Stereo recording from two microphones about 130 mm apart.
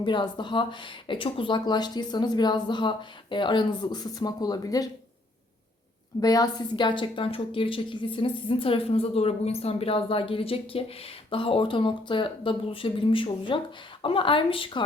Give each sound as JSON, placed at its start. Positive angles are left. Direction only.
{"t": 0.0, "sound": "speech", "side_deg": 35}
{"t": 6.1, "sound": "a woman's voice", "side_deg": 30}